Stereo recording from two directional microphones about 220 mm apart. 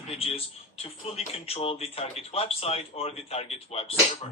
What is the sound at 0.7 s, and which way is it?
Speech, 25° left (ahead or behind).